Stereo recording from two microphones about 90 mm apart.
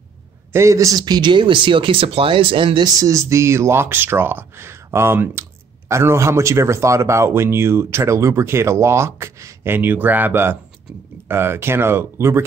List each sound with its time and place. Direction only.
0.5 s speech: 35° right (ahead or behind); by 2.9 s 70° right (ahead or behind)
2.9 s speech: 40° right (ahead or behind)